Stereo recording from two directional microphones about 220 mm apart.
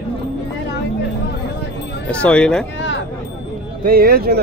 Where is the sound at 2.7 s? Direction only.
55° left (ahead or behind).